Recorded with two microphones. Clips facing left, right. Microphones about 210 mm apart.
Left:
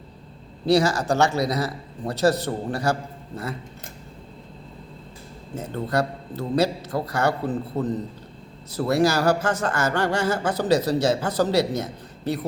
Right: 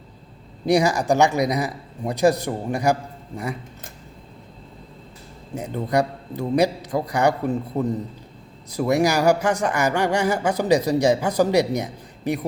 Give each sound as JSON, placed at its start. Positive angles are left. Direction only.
{"t": 0.6, "sound": "speech", "side_deg": -15}
{"t": 5.5, "sound": "speech", "side_deg": -15}